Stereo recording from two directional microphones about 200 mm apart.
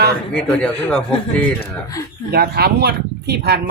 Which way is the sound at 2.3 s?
50° right (ahead or behind).